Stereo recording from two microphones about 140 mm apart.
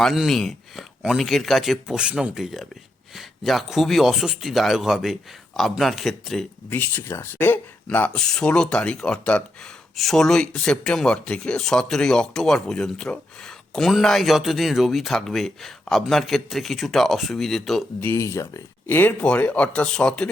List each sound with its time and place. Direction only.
0.0 s speech: centre (ahead or behind)
6.7 s speech: 15° left (ahead or behind)
18.0 s speech: 20° left (ahead or behind)